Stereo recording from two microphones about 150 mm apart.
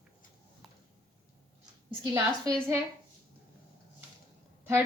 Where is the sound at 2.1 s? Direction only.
20° right (ahead or behind).